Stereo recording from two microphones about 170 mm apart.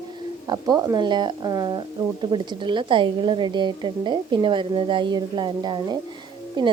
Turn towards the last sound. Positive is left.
turn(degrees=-25)  # may be behind; listen again after turning